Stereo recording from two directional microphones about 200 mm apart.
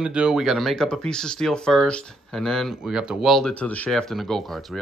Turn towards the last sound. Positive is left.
turn(degrees=0)  # may be behind; listen again after turning